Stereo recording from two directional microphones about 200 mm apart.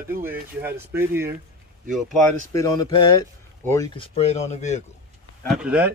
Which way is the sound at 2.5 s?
20° left (ahead or behind).